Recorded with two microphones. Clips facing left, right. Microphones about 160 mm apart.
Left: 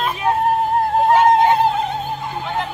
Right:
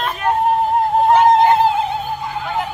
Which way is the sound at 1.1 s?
Centre (ahead or behind).